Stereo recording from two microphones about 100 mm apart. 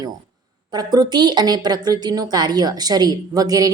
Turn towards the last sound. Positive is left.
turn(degrees=-40)  # may be behind; listen again after turning